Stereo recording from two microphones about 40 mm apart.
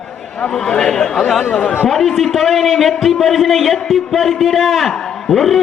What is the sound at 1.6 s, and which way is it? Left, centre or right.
Speech, left.